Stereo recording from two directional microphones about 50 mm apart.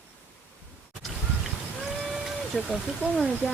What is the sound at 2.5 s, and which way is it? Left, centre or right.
Speech, left.